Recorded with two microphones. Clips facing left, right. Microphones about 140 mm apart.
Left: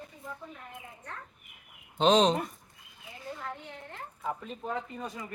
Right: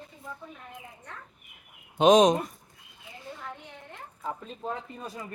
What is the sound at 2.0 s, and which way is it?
Speech, 15° right (ahead or behind).